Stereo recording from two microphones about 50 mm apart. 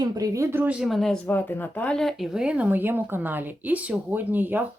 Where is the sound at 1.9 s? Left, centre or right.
Centre.